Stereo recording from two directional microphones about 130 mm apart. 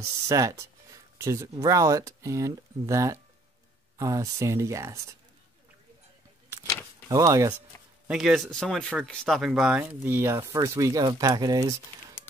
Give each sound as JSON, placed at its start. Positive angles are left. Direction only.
{"t": 0.3, "sound": "speech", "side_deg": -25}
{"t": 7.1, "sound": "speech", "side_deg": -25}
{"t": 7.7, "sound": "a sound", "side_deg": 20}
{"t": 8.1, "sound": "speech", "side_deg": 0}